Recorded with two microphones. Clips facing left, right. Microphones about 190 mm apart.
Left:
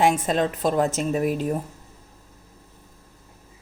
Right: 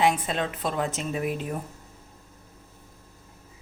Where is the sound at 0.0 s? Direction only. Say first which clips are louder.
Left 4 dB; 45° left (ahead or behind).